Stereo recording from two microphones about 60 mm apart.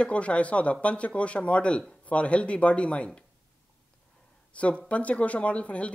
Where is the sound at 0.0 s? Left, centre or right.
Left.